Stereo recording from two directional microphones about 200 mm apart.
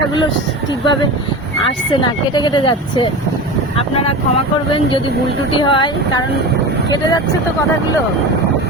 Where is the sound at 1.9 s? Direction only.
25° left (ahead or behind).